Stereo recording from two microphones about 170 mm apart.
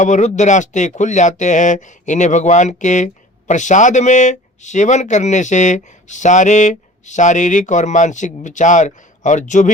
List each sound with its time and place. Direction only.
0.0 s speech: 45° left (ahead or behind)